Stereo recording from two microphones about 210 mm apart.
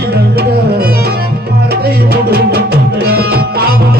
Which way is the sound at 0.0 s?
50° right (ahead or behind).